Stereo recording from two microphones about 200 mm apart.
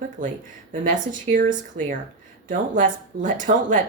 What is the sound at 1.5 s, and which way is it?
Speech, 40° right (ahead or behind).